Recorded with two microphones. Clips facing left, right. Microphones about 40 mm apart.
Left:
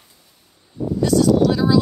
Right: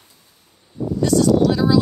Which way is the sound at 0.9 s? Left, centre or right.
Centre.